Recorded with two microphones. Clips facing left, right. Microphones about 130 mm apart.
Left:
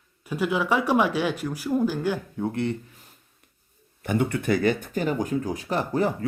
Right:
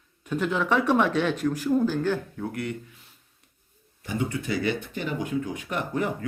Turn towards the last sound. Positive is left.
turn(degrees=35)  # may be behind; listen again after turning